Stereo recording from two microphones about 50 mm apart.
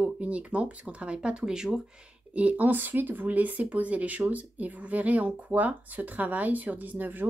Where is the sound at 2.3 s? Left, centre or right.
Right.